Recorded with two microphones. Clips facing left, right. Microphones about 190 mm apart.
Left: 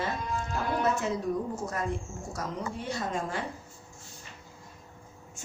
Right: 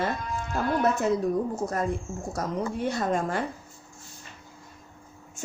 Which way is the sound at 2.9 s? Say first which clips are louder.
Right 4 dB; 55° right (ahead or behind).